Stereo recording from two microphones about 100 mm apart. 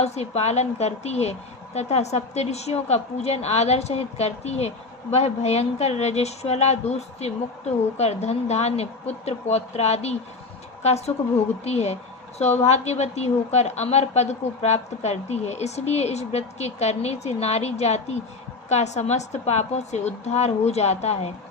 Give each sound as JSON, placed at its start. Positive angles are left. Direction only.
{"t": 0.0, "sound": "a woman's voice", "side_deg": 90}